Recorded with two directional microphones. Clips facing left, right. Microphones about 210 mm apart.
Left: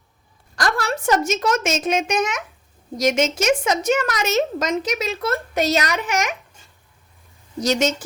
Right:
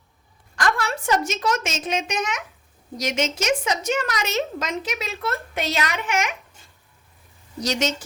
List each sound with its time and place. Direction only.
0.5 s a woman's voice: 35° left (ahead or behind)
7.6 s a woman's voice: 50° left (ahead or behind)